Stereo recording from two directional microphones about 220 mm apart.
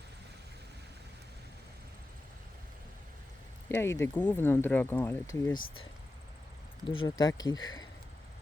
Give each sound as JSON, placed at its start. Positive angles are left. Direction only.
{"t": 3.7, "sound": "speech", "side_deg": 10}
{"t": 6.8, "sound": "speech", "side_deg": 25}